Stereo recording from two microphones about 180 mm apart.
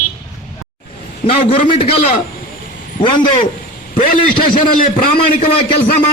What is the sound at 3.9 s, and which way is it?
A man's voice, 50° left (ahead or behind).